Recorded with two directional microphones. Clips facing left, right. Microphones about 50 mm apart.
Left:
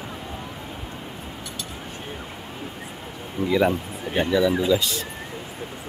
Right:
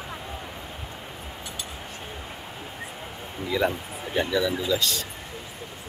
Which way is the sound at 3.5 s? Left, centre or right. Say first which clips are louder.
Left 4 dB; centre.